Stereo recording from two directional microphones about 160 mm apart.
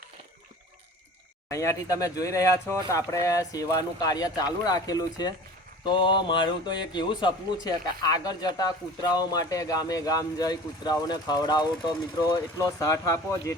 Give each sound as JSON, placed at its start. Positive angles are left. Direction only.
{"t": 1.5, "sound": "speech", "side_deg": 20}